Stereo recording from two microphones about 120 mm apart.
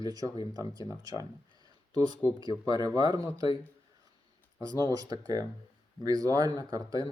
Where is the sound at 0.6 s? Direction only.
30° right (ahead or behind).